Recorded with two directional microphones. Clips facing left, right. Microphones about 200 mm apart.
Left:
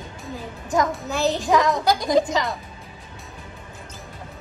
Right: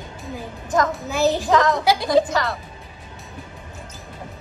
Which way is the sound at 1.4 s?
15° left (ahead or behind).